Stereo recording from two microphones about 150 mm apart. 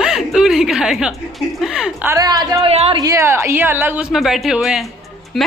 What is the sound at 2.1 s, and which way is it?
Speech, 25° right (ahead or behind).